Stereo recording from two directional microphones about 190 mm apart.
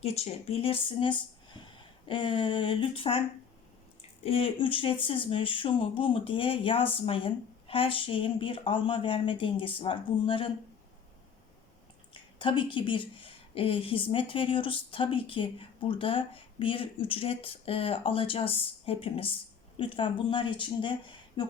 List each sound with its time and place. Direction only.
0.0 s speech: 35° left (ahead or behind)
4.2 s a woman's voice: 30° left (ahead or behind)
12.1 s a woman's voice: 25° left (ahead or behind)